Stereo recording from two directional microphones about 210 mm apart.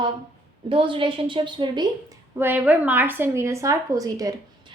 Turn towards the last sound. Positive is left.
turn(degrees=-15)  # may be behind; listen again after turning